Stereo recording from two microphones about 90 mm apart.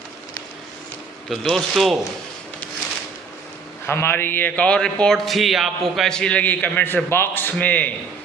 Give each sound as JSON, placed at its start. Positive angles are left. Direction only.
{"t": 1.3, "sound": "a man's voice", "side_deg": 0}
{"t": 3.8, "sound": "a man's voice", "side_deg": 25}